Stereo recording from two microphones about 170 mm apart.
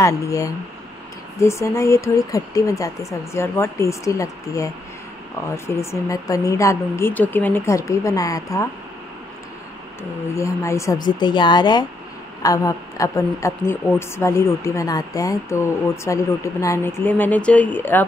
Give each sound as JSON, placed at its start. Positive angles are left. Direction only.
{"t": 0.0, "sound": "speech", "side_deg": 20}
{"t": 5.7, "sound": "a woman's voice", "side_deg": 15}
{"t": 10.3, "sound": "a woman's voice", "side_deg": 15}